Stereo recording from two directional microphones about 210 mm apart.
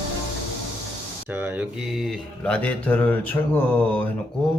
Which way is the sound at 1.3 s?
5° right (ahead or behind).